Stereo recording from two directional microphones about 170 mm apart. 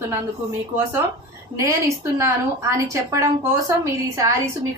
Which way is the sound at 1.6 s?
15° right (ahead or behind).